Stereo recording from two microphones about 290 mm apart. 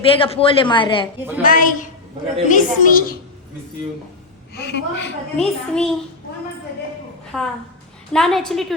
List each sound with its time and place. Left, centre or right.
0.0 s a woman's voice: centre
1.4 s a woman's voice: left
4.5 s a woman's voice: left
5.4 s a child's voice: centre
7.3 s a child's voice: centre